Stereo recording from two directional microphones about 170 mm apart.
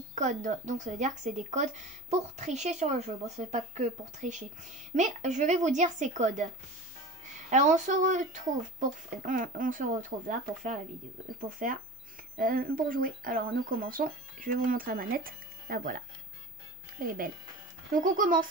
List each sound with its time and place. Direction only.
0.1 s speech: 45° right (ahead or behind)
17.0 s speech: 55° right (ahead or behind)